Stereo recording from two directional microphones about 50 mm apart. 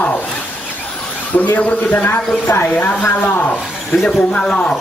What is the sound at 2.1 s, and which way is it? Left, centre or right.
Speech, left.